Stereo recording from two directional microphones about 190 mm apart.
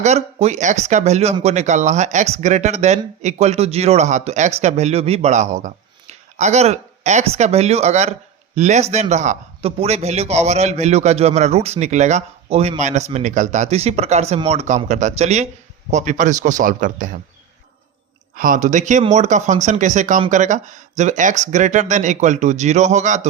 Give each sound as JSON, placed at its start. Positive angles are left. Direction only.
{"t": 0.0, "sound": "speech", "side_deg": -35}
{"t": 18.3, "sound": "speech", "side_deg": -45}